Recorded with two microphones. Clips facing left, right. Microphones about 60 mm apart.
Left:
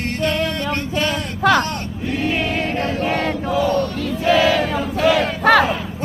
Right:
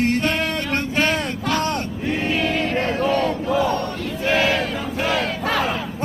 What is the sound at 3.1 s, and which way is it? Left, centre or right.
Battle cry, left.